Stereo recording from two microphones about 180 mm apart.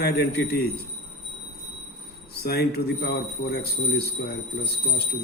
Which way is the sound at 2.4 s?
60° left (ahead or behind).